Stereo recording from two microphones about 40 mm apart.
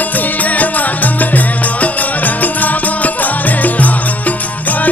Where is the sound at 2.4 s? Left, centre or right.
Left.